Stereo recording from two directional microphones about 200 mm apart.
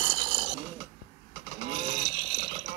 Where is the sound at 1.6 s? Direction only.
25° right (ahead or behind).